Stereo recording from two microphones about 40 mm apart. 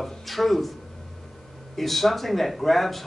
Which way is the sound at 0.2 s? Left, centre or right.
Centre.